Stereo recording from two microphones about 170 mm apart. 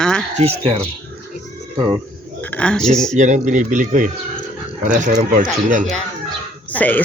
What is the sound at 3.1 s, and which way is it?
Speech, 45° right (ahead or behind).